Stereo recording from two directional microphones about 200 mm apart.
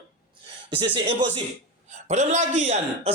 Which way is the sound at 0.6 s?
25° right (ahead or behind).